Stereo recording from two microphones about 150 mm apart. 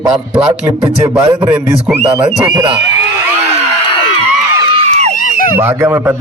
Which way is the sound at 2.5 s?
30° right (ahead or behind).